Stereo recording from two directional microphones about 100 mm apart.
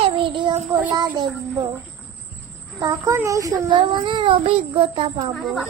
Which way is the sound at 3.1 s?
30° right (ahead or behind).